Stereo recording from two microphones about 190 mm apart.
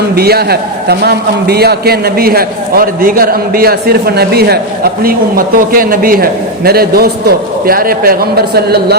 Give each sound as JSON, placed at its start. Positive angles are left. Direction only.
{"t": 0.2, "sound": "a man's voice", "side_deg": -55}